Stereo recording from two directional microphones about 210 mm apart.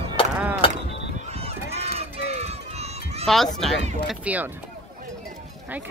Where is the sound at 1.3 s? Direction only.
30° right (ahead or behind).